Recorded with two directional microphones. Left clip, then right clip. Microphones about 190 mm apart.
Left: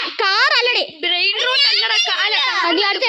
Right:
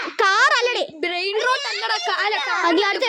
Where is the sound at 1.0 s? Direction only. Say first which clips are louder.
Left 3 dB; 50° right (ahead or behind).